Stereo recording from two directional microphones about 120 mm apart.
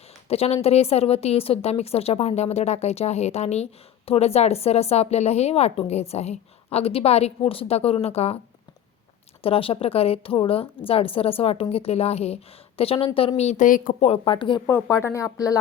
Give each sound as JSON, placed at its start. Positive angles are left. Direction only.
{"t": 0.3, "sound": "a woman's voice", "side_deg": 60}
{"t": 9.4, "sound": "a woman's voice", "side_deg": 50}
{"t": 15.0, "sound": "speech", "side_deg": 25}